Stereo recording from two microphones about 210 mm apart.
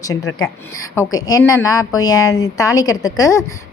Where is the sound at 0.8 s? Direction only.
15° left (ahead or behind).